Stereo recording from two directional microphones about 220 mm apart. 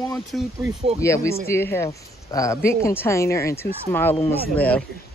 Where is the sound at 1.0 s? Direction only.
15° left (ahead or behind).